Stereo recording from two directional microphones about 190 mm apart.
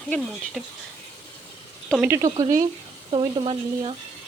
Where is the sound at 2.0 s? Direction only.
15° right (ahead or behind).